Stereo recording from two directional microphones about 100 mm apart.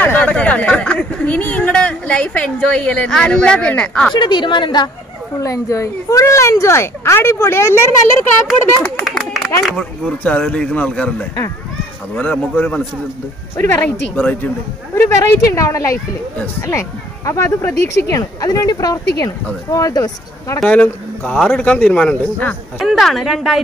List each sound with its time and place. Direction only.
0.0 s speech: 15° left (ahead or behind)
4.1 s a woman's voice: 50° left (ahead or behind)
5.4 s speech: 35° left (ahead or behind)
9.0 s a sound: centre (ahead or behind)
9.8 s speech: 10° left (ahead or behind); by 20.6 s 35° left (ahead or behind)
20.6 s speech: 15° left (ahead or behind)
22.8 s a woman's voice: centre (ahead or behind)